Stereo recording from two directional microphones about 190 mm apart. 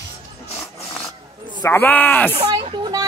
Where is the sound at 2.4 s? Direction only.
25° right (ahead or behind).